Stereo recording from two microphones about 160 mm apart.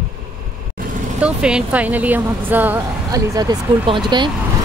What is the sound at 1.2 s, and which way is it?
A woman's voice, 5° right (ahead or behind).